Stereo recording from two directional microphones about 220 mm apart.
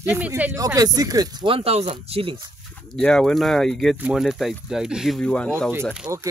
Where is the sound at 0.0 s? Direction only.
10° right (ahead or behind); by 2.5 s 25° right (ahead or behind).